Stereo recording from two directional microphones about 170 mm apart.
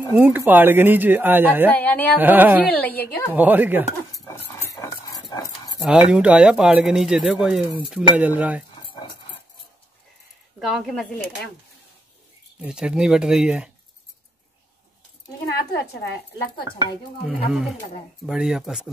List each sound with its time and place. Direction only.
0.2 s speech: 10° right (ahead or behind)
1.7 s a woman's voice: 10° left (ahead or behind)
2.1 s speech: 10° right (ahead or behind)
2.7 s a woman's voice: 10° left (ahead or behind)
3.3 s speech: 10° right (ahead or behind)
4.1 s cutlery: 20° left (ahead or behind)
5.8 s speech: 5° right (ahead or behind)
7.6 s chopping: 30° left (ahead or behind)
7.9 s speech: 10° right (ahead or behind)
10.6 s speech: centre (ahead or behind)
12.6 s speech: 5° right (ahead or behind)
17.5 s speech: centre (ahead or behind)